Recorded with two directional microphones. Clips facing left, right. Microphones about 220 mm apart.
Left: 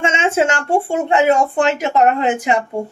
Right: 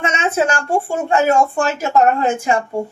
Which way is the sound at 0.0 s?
25° left (ahead or behind).